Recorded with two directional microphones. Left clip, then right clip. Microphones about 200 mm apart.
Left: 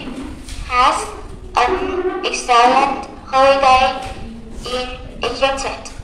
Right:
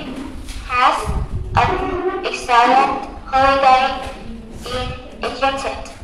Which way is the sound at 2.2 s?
20° left (ahead or behind).